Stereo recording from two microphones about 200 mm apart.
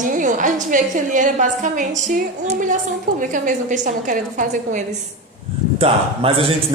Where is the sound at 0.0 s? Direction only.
40° right (ahead or behind).